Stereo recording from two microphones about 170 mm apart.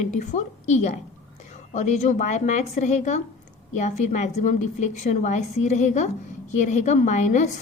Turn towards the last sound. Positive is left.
turn(degrees=45)  # may be behind; listen again after turning